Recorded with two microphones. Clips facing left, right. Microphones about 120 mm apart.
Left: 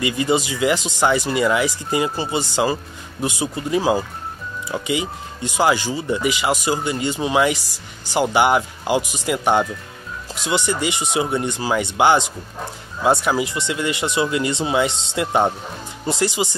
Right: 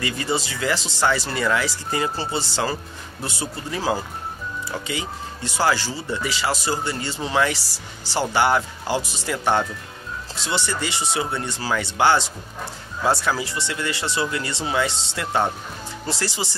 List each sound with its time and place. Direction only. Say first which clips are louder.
0.0 s speech: left 6 dB; 15° left (ahead or behind)